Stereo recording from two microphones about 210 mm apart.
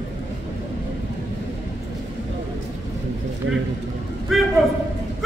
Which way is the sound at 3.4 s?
65° right (ahead or behind).